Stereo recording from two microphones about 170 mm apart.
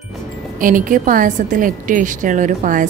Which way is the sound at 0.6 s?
50° right (ahead or behind).